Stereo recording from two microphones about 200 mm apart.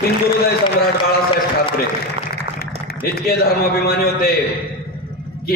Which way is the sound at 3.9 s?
50° left (ahead or behind).